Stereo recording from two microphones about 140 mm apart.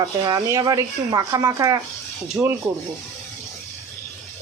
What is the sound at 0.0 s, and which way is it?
Speech, 30° right (ahead or behind).